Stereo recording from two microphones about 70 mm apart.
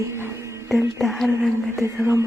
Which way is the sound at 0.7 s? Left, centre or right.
Centre.